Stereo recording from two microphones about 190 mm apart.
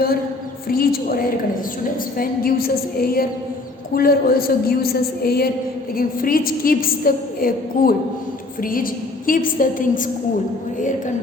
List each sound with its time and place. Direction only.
0.7 s a woman's voice: 50° left (ahead or behind)